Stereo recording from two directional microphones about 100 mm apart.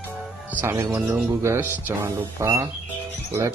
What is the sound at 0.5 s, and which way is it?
Speech, 25° right (ahead or behind).